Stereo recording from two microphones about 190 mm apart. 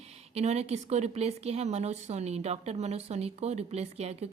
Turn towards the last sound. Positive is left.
turn(degrees=-35)  # may be behind; listen again after turning